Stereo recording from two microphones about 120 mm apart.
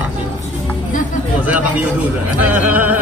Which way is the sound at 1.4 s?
10° right (ahead or behind).